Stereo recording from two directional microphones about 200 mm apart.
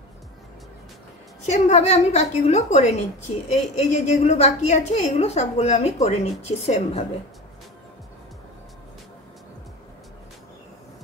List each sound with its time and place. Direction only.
1.4 s a woman's voice: 35° left (ahead or behind)